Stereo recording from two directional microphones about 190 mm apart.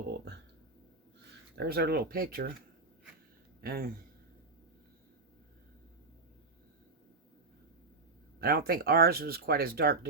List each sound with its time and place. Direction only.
1.5 s speech: 55° right (ahead or behind)
3.6 s speech: 50° right (ahead or behind)
8.4 s speech: 50° right (ahead or behind)